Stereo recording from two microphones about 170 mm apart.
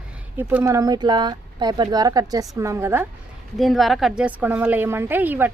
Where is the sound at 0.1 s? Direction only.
10° right (ahead or behind).